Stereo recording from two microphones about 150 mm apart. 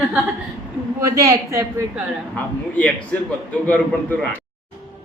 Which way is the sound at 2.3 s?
10° left (ahead or behind).